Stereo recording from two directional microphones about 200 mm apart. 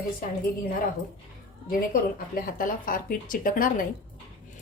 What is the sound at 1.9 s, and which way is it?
Speech, 45° left (ahead or behind).